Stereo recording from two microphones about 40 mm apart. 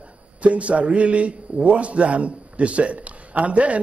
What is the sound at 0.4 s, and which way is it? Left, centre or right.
A man's voice, right.